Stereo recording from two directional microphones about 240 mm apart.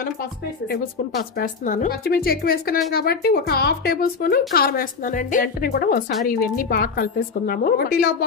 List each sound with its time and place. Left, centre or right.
1.3 s speech: left